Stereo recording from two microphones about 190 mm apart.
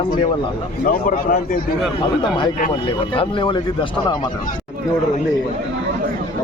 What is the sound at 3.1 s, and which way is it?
Speech, 25° left (ahead or behind).